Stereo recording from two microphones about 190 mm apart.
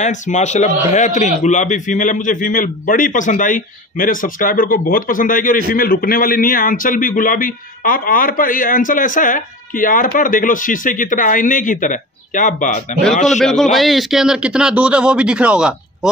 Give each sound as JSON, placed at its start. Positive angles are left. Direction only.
{"t": 0.0, "sound": "a man's voice", "side_deg": 40}
{"t": 13.3, "sound": "a man's voice", "side_deg": 0}